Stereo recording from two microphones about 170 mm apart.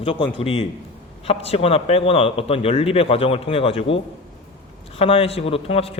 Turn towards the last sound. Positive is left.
turn(degrees=35)  # may be behind; listen again after turning